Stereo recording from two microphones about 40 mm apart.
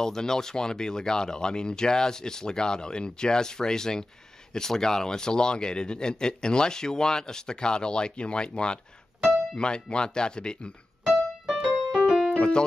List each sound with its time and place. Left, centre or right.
0.0 s speech: centre
11.1 s piano: centre
12.4 s music: left